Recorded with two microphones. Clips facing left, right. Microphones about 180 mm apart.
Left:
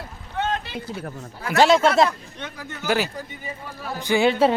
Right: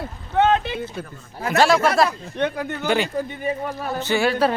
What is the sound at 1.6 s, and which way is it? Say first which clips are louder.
Speech: left 1 dB; 20° left (ahead or behind).